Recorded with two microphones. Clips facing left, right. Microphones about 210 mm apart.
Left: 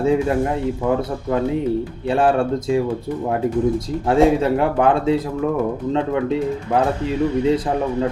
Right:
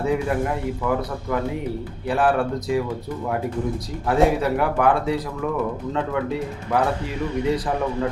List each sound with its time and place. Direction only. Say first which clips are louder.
0.0 s a man's voice: left 5 dB; 25° left (ahead or behind)
4.1 s a man's voice: left 4 dB; 25° left (ahead or behind)